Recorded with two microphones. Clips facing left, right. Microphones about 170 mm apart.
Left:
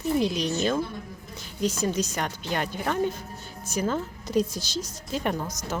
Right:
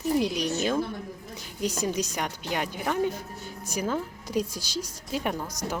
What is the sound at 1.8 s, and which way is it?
A woman's voice, 15° right (ahead or behind).